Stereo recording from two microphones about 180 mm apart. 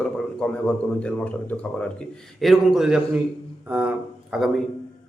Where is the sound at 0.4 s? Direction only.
5° left (ahead or behind).